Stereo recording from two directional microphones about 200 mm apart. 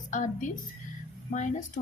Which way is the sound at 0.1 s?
40° left (ahead or behind).